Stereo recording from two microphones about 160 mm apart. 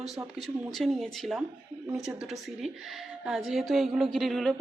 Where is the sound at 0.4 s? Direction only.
Centre (ahead or behind).